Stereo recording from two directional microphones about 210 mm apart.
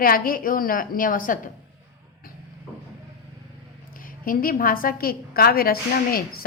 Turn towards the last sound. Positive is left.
turn(degrees=45)  # may be behind; listen again after turning